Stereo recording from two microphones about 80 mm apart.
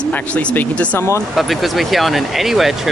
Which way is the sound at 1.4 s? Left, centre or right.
Centre.